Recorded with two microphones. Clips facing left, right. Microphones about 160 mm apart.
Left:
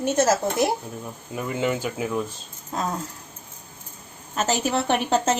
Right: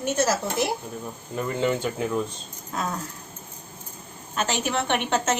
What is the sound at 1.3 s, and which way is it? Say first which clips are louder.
Speech: right 1 dB; 5° left (ahead or behind).